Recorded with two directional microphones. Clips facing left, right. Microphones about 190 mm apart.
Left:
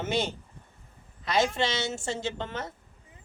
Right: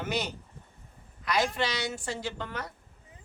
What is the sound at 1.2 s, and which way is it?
A woman's voice, 25° left (ahead or behind).